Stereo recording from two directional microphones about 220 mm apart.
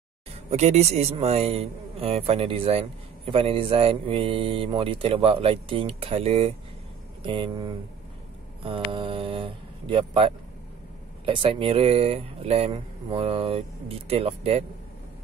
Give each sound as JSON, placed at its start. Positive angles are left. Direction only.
{"t": 0.5, "sound": "speech", "side_deg": -30}